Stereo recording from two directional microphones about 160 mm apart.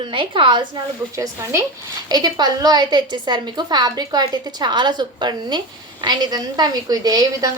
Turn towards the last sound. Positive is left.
turn(degrees=-25)  # may be behind; listen again after turning